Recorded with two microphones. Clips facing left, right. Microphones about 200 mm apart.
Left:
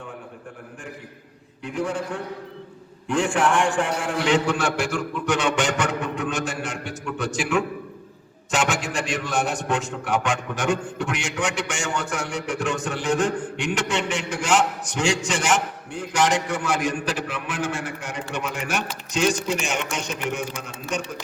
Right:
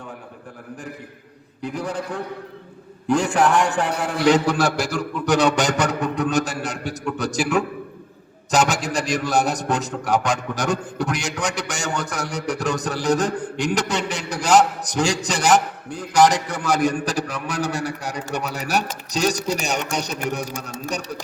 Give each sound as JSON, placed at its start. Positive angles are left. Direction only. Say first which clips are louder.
{"t": 1.6, "sound": "a man's voice", "louder": "even", "side_deg": -35}